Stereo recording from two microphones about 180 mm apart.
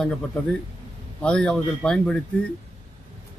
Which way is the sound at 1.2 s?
5° left (ahead or behind).